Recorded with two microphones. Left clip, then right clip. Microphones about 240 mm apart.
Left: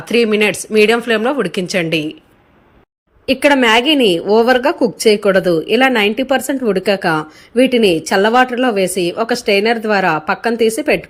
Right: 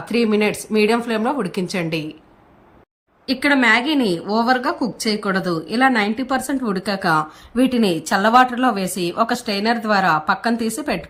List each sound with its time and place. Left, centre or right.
0.1 s a woman's voice: centre
3.2 s a woman's voice: centre
7.7 s a woman's voice: right
7.9 s a woman's voice: centre